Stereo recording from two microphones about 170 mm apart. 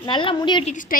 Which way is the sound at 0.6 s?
50° left (ahead or behind).